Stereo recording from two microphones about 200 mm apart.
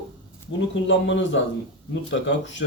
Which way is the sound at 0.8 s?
65° left (ahead or behind).